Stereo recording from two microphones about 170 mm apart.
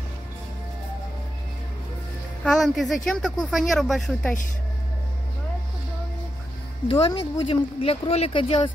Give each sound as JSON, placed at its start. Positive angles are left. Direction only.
{"t": 2.4, "sound": "speech", "side_deg": 0}
{"t": 6.9, "sound": "speech", "side_deg": 25}